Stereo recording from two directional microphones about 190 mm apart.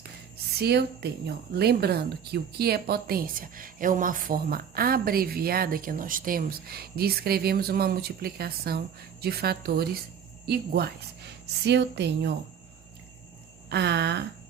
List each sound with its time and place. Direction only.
0.6 s a woman's voice: 60° right (ahead or behind)
13.7 s a woman's voice: 60° right (ahead or behind)